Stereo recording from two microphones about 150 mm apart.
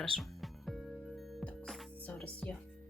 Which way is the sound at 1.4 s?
5° left (ahead or behind).